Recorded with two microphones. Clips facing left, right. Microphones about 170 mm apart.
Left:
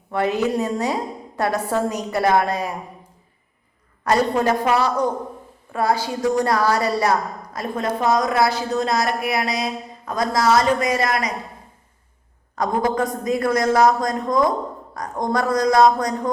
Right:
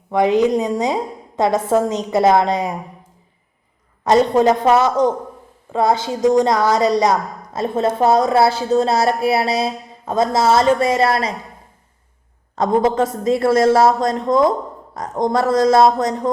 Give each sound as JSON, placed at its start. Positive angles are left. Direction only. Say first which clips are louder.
{"t": 0.1, "sound": "a woman's voice", "louder": "right 6 dB", "side_deg": -15}
{"t": 4.0, "sound": "a woman's voice", "louder": "right 5 dB", "side_deg": -20}
{"t": 12.5, "sound": "a woman's voice", "louder": "right 5 dB", "side_deg": -25}